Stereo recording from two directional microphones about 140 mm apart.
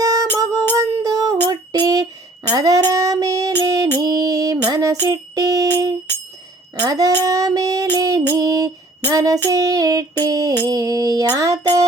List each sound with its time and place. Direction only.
0.0 s music: 25° right (ahead or behind)